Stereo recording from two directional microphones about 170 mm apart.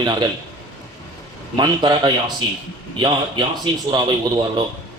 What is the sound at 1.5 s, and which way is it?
A man's voice, 25° right (ahead or behind).